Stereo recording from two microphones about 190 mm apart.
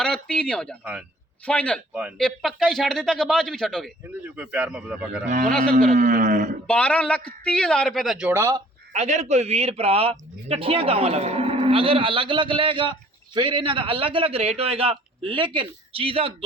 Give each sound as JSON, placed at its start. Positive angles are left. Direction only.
{"t": 0.0, "sound": "speech", "side_deg": 5}
{"t": 1.9, "sound": "speech", "side_deg": -5}
{"t": 4.2, "sound": "a man's voice", "side_deg": -10}
{"t": 5.9, "sound": "speech", "side_deg": -40}
{"t": 6.7, "sound": "speech", "side_deg": 5}
{"t": 8.3, "sound": "a man's voice", "side_deg": -15}
{"t": 8.9, "sound": "a man's voice", "side_deg": -35}